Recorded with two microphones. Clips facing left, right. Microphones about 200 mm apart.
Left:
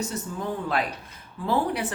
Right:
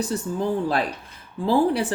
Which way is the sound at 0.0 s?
35° right (ahead or behind).